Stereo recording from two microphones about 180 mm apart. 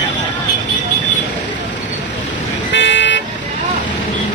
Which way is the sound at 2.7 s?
80° left.